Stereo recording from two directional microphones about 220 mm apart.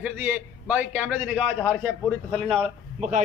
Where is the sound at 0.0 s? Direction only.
5° right (ahead or behind).